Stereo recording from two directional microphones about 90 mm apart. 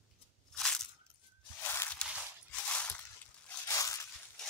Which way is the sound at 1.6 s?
25° left (ahead or behind).